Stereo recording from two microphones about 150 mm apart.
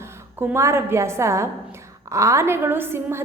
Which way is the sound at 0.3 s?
15° right (ahead or behind).